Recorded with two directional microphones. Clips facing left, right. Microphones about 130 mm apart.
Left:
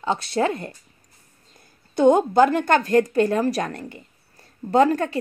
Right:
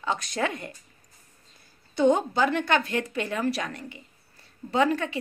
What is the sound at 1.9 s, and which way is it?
Speech, 50° left (ahead or behind).